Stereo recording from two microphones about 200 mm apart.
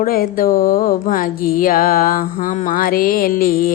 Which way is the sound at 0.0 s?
45° left (ahead or behind).